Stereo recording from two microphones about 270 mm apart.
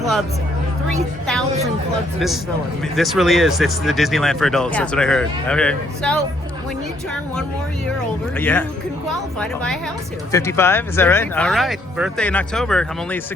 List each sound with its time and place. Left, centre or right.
2.1 s speech: centre
8.4 s speech: centre
10.3 s speech: centre